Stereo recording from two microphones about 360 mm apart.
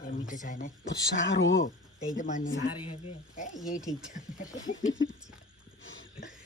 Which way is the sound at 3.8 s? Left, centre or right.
Centre.